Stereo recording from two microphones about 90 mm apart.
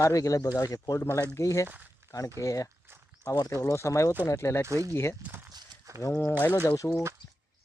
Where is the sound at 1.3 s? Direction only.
35° left (ahead or behind).